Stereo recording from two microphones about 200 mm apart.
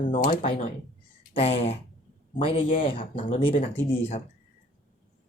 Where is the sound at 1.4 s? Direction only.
30° left (ahead or behind).